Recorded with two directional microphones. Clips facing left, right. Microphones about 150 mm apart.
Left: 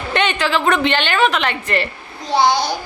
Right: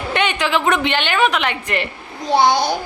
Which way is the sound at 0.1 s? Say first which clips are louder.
Left 1 dB; 10° right (ahead or behind).